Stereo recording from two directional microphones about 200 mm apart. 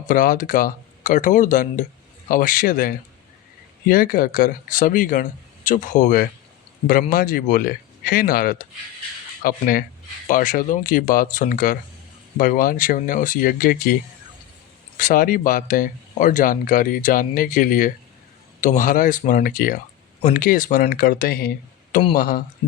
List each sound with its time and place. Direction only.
0.1 s speech: 45° left (ahead or behind)
14.9 s speech: 45° left (ahead or behind)